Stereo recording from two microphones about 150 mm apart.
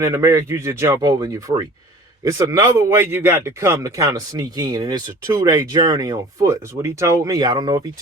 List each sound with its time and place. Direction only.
0.0 s speech: 20° right (ahead or behind)